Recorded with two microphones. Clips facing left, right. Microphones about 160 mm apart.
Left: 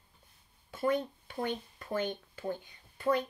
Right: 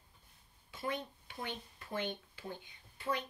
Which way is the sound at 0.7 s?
45° left (ahead or behind).